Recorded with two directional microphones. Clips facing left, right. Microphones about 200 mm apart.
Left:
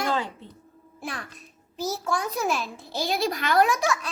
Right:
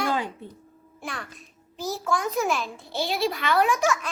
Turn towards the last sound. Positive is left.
turn(degrees=40)  # may be behind; listen again after turning